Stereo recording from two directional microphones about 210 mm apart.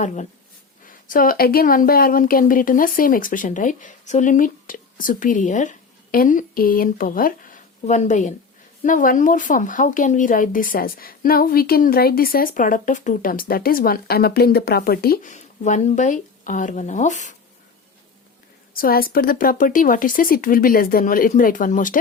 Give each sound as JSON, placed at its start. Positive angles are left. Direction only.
{"t": 0.0, "sound": "a woman's voice", "side_deg": 35}
{"t": 18.7, "sound": "a woman's voice", "side_deg": 45}